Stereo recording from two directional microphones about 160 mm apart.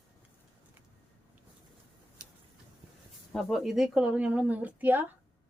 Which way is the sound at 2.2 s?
55° right (ahead or behind).